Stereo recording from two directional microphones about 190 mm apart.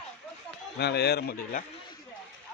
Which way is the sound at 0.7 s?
60° left (ahead or behind).